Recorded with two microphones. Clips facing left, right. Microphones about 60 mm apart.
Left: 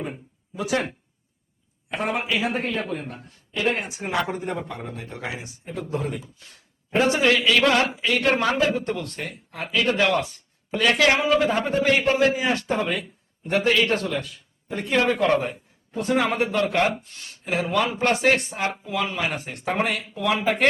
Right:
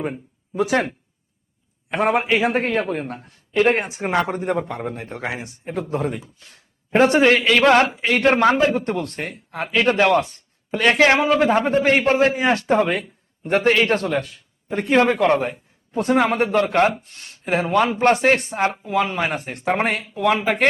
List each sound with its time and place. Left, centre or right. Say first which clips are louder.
0.5 s a man's voice: right 5 dB; right
1.9 s a man's voice: right 7 dB; right
16.0 s speech: right 4 dB; right